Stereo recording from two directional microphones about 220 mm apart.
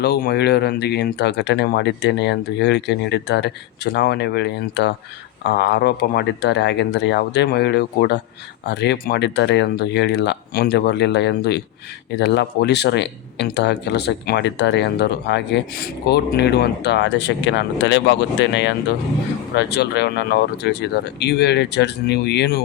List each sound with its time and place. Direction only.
0.0 s speech: 45° left (ahead or behind)